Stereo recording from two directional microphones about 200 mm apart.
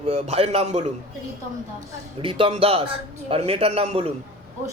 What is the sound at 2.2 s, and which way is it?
A man's voice, 25° right (ahead or behind).